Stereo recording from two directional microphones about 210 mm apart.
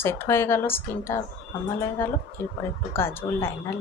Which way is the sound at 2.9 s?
10° left (ahead or behind).